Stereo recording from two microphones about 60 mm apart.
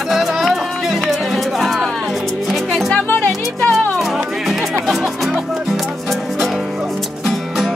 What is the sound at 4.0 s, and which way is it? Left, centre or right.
Music, centre.